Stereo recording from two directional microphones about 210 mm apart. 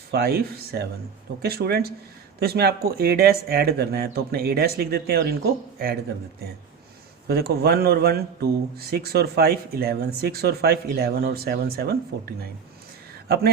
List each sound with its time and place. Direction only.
0.1 s speech: 45° right (ahead or behind)
7.3 s speech: 50° right (ahead or behind)
13.2 s speech: 50° right (ahead or behind)